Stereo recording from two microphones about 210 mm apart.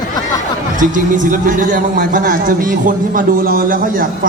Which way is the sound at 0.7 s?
35° right (ahead or behind).